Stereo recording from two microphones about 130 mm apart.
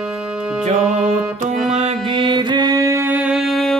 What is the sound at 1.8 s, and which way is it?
Music, 55° right (ahead or behind).